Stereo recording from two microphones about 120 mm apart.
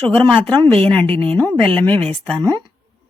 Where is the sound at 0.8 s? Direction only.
15° left (ahead or behind).